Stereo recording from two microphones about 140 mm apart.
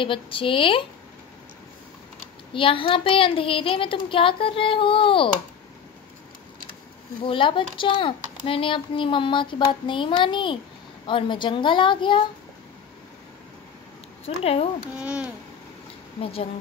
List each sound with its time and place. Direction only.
0.0 s speech: 40° left (ahead or behind)
2.5 s speech: 40° left (ahead or behind)
7.2 s speech: 40° left (ahead or behind)
14.2 s speech: 45° left (ahead or behind)
15.0 s speech: 10° right (ahead or behind)
16.2 s speech: 45° left (ahead or behind)